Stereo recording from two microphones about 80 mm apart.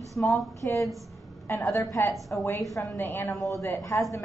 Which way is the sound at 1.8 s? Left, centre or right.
Left.